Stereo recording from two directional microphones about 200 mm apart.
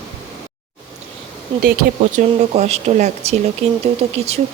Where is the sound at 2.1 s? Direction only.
35° right (ahead or behind).